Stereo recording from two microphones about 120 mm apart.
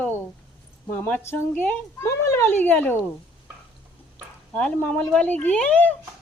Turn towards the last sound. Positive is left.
turn(degrees=10)  # may be behind; listen again after turning